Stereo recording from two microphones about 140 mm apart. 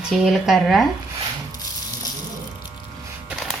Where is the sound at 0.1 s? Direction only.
Centre (ahead or behind).